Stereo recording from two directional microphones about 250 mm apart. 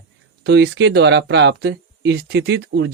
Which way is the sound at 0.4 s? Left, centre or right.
Right.